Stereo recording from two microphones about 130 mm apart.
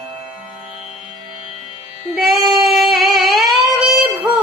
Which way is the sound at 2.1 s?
Centre (ahead or behind).